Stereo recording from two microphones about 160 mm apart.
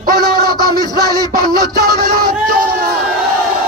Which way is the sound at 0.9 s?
70° right (ahead or behind).